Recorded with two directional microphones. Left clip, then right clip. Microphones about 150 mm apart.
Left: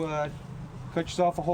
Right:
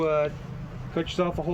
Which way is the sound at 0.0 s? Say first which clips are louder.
Right 6 dB; 30° left (ahead or behind).